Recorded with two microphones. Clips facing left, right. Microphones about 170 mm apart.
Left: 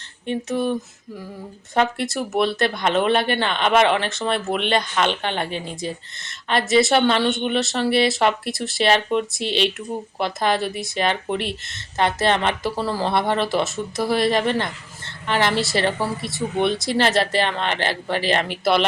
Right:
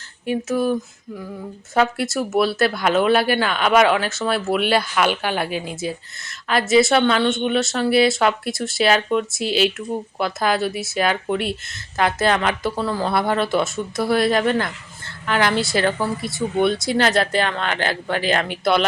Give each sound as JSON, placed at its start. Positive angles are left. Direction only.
{"t": 0.3, "sound": "speech", "side_deg": -5}
{"t": 1.7, "sound": "speech", "side_deg": -5}